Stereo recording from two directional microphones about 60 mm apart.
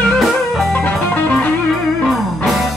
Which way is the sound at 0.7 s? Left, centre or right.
Left.